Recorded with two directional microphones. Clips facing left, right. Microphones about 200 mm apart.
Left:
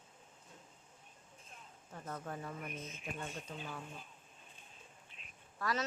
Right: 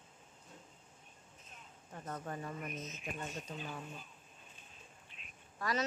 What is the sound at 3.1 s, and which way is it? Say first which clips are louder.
Speech: right 1 dB; 5° right (ahead or behind).